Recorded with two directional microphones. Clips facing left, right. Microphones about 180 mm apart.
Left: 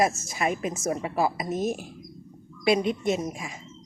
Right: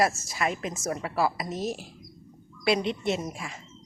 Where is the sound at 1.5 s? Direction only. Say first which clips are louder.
Left 4 dB; 50° left (ahead or behind).